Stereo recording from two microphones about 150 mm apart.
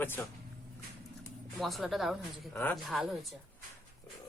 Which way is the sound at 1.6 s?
Centre (ahead or behind).